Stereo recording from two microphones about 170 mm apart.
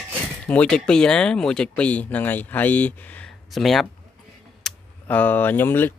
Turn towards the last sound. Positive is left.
turn(degrees=10)  # may be behind; listen again after turning